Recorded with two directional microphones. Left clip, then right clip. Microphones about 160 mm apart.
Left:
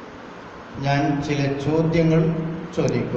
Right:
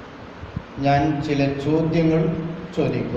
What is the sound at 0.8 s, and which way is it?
A man's voice, 15° right (ahead or behind).